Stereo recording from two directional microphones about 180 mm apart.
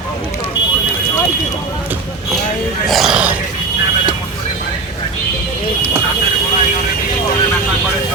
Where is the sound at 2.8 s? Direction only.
Centre (ahead or behind).